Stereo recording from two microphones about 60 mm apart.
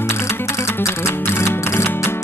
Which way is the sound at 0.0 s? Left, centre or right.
Left.